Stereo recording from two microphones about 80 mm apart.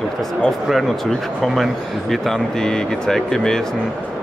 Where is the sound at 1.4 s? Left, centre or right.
Centre.